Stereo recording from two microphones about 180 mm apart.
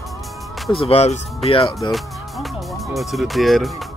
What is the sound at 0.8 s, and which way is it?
Speech, 35° left (ahead or behind).